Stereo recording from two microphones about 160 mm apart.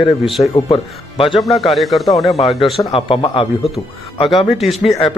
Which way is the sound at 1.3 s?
Centre (ahead or behind).